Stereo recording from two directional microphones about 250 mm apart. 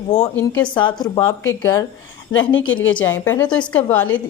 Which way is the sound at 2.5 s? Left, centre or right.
Left.